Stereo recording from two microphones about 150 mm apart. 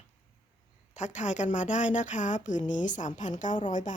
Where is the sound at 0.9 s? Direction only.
50° left (ahead or behind).